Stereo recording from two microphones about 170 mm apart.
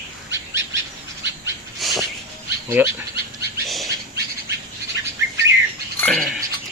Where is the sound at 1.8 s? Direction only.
Centre (ahead or behind).